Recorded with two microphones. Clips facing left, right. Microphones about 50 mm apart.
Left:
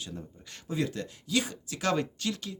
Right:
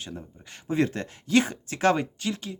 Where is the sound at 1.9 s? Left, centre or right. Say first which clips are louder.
Right 1 dB; right.